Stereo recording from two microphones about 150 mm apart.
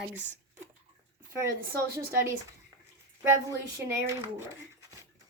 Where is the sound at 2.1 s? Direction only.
20° right (ahead or behind).